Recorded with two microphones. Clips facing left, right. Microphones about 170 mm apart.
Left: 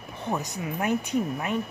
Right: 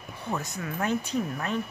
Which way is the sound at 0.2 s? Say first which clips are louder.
Left 3 dB; 20° left (ahead or behind).